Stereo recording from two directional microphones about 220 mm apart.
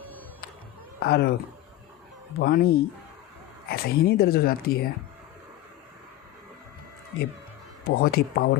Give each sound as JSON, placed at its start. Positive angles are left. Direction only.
{"t": 0.9, "sound": "speech", "side_deg": 45}
{"t": 2.4, "sound": "speech", "side_deg": 45}
{"t": 7.9, "sound": "speech", "side_deg": 45}